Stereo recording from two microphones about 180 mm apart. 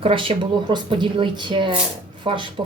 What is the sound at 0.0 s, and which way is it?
Speech, 30° right (ahead or behind).